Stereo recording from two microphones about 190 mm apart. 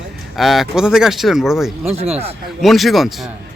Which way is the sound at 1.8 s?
35° right (ahead or behind).